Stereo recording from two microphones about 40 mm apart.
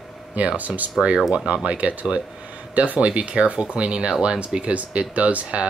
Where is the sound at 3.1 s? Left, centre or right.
Right.